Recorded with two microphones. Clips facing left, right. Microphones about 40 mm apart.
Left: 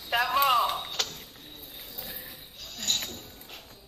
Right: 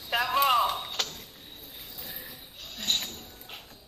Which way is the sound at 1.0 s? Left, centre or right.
Centre.